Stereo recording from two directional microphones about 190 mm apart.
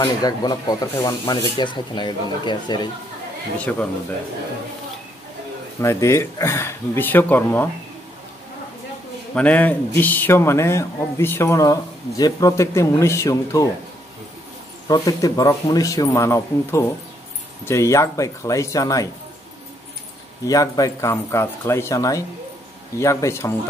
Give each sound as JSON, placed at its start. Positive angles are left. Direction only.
{"t": 0.0, "sound": "speech", "side_deg": 20}
{"t": 5.8, "sound": "speech", "side_deg": 15}
{"t": 9.3, "sound": "speech", "side_deg": 5}
{"t": 14.9, "sound": "speech", "side_deg": 20}
{"t": 20.4, "sound": "speech", "side_deg": 20}